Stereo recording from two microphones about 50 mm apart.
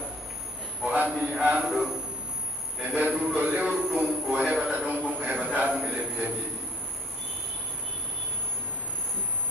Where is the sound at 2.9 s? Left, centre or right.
Right.